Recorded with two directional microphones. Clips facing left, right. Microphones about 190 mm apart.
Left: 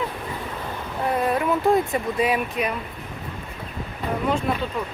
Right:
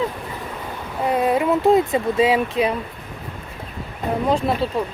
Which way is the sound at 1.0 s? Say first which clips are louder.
Right 4 dB; 20° right (ahead or behind).